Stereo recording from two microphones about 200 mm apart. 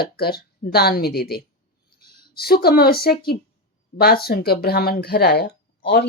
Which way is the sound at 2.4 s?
50° left (ahead or behind).